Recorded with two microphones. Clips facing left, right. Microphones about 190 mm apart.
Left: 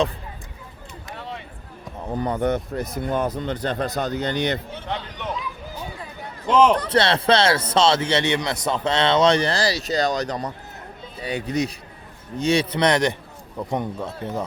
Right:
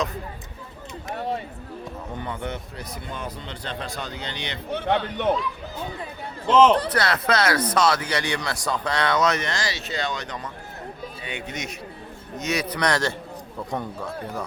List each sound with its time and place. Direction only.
1.1 s a sound: 45° right (ahead or behind)
2.1 s a man's voice: 40° left (ahead or behind)
4.7 s a man's voice: 60° right (ahead or behind)
6.5 s a man's voice: 10° left (ahead or behind)
6.8 s speech: 25° left (ahead or behind)